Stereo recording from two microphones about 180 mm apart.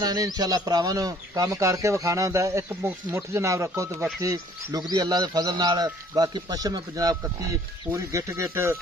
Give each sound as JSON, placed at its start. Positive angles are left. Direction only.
{"t": 0.0, "sound": "a man's voice", "side_deg": -20}